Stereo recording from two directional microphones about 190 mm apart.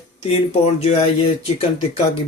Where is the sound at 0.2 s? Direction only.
35° left (ahead or behind).